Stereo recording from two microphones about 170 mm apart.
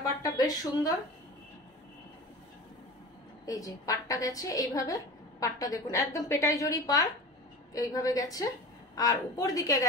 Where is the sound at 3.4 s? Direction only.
20° left (ahead or behind).